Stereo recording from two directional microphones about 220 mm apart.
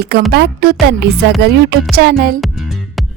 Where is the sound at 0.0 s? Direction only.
45° right (ahead or behind).